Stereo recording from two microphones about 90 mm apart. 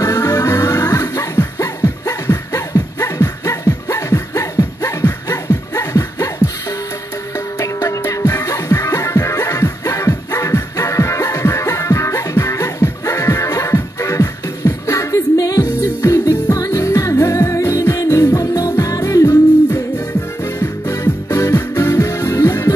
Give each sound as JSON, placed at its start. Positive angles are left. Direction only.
{"t": 0.0, "sound": "music", "side_deg": 35}
{"t": 7.5, "sound": "music", "side_deg": 35}